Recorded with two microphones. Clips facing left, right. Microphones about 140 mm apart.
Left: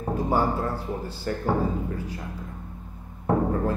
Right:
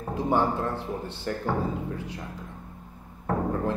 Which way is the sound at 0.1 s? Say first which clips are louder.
Left 1 dB; 5° left (ahead or behind).